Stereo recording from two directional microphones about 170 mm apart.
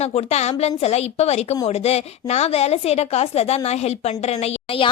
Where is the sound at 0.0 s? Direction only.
40° left (ahead or behind).